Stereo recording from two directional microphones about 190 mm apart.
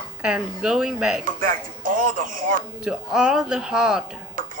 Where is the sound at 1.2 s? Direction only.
45° right (ahead or behind).